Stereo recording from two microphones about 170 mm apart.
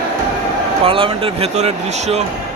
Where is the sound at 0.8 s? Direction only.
30° right (ahead or behind).